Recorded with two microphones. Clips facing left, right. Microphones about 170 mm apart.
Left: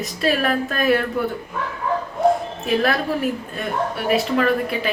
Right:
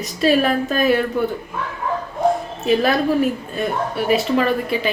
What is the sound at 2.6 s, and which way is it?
A woman's voice, centre (ahead or behind).